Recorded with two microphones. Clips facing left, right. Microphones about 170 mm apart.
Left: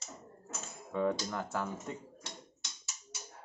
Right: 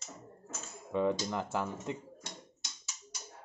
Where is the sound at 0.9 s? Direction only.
20° right (ahead or behind).